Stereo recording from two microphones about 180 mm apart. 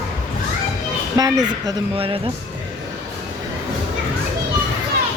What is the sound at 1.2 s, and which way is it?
Speech, 20° right (ahead or behind).